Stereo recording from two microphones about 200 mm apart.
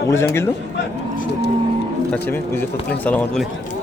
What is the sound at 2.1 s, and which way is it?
Speech, 10° left (ahead or behind).